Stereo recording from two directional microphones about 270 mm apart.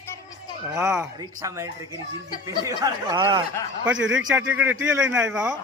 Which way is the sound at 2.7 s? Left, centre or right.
Centre.